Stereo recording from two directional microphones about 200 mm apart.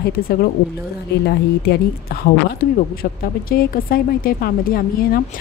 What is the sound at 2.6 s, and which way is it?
A woman's voice, 45° left (ahead or behind).